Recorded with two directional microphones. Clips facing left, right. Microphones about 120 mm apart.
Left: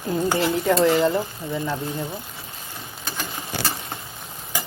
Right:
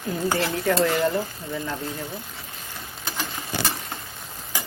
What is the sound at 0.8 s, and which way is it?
Speech, 15° left (ahead or behind).